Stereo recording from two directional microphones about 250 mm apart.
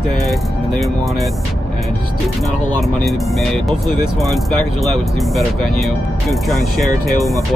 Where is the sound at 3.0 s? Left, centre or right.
Centre.